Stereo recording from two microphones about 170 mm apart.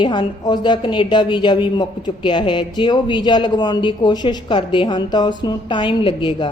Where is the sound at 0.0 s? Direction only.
25° left (ahead or behind).